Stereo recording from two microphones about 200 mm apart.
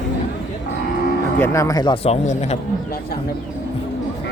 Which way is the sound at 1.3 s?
15° left (ahead or behind).